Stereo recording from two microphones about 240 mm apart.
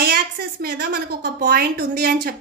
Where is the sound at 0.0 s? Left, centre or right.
Right.